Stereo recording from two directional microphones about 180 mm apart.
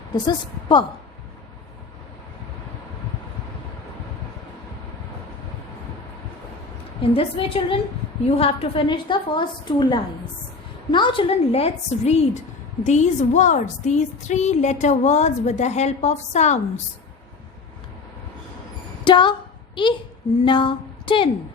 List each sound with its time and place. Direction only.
0.3 s a woman's voice: 25° left (ahead or behind)
7.0 s a woman's voice: 30° left (ahead or behind)
19.0 s a sound: 25° left (ahead or behind)
20.4 s a woman's voice: 25° left (ahead or behind)